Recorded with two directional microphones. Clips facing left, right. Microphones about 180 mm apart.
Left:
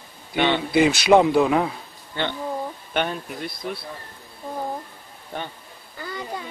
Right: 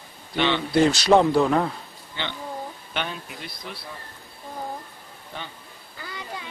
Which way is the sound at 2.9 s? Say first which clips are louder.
Left 6 dB; 50° left (ahead or behind).